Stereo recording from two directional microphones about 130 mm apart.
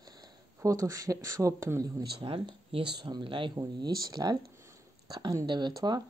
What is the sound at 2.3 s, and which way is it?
Speech, 40° right (ahead or behind).